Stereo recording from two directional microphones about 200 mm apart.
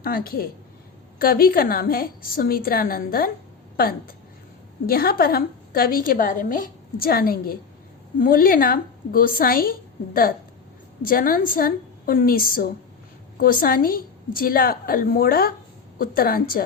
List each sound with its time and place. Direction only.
0.0 s a woman's voice: 50° left (ahead or behind)
11.0 s a woman's voice: 45° left (ahead or behind)